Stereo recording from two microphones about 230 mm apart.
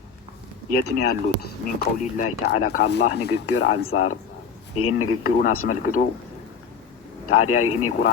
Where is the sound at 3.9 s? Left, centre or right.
Left.